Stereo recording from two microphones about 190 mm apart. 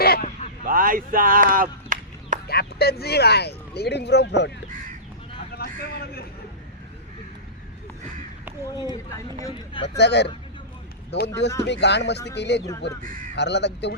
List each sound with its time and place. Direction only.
0.0 s a sound: 55° left (ahead or behind)
0.6 s speech: 45° right (ahead or behind)
2.5 s speech: 55° left (ahead or behind)
5.6 s speech: 55° left (ahead or behind)
8.6 s speech: 15° left (ahead or behind)
10.0 s speech: 65° left (ahead or behind)